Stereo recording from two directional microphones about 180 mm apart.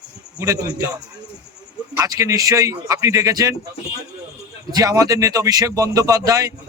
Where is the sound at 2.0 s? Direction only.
15° right (ahead or behind).